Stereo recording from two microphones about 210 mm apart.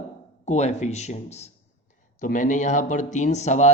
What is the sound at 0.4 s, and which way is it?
Speech, 30° left (ahead or behind).